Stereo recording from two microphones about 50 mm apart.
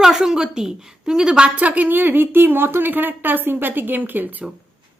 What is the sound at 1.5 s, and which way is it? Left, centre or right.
A woman's voice, right.